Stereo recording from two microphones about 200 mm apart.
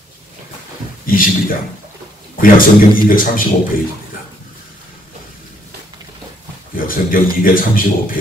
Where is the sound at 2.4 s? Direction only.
45° left (ahead or behind).